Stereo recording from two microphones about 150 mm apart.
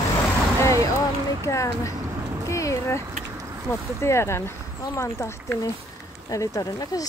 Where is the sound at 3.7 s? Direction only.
20° left (ahead or behind).